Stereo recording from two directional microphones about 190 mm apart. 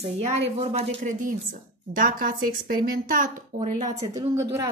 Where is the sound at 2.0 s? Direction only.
45° right (ahead or behind).